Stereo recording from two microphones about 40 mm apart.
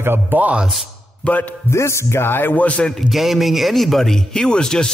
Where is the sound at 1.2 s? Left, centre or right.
Left.